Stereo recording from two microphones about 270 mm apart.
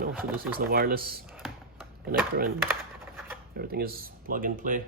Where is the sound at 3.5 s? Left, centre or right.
Right.